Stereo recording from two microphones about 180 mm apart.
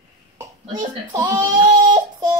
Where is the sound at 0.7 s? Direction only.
25° right (ahead or behind).